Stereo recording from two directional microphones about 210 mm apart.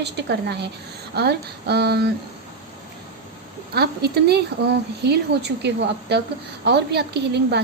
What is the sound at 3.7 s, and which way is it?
A woman's voice, 50° right (ahead or behind).